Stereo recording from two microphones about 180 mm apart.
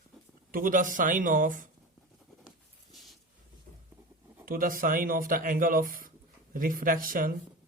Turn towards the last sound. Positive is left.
turn(degrees=-50)  # may be behind; listen again after turning